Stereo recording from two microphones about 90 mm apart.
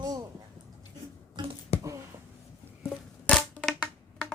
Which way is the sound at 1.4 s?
60° right (ahead or behind).